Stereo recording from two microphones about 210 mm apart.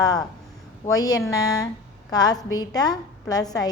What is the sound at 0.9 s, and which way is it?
A man's voice, 15° left (ahead or behind).